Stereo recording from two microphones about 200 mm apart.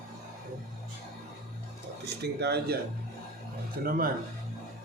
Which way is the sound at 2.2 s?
55° right (ahead or behind).